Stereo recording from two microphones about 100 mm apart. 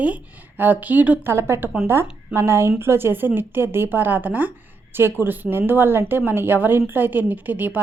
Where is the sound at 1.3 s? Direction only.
25° right (ahead or behind).